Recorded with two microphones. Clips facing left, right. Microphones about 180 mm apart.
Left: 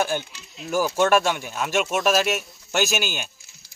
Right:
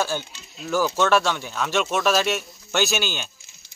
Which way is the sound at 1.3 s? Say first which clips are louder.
Even; 10° left (ahead or behind).